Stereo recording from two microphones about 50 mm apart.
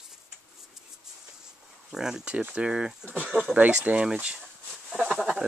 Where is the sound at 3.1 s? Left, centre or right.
Right.